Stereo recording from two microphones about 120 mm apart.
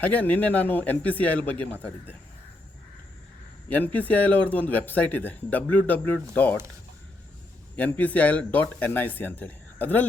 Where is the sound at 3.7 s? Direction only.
15° left (ahead or behind).